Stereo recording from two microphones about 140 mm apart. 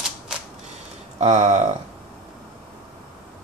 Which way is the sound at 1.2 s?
60° right (ahead or behind).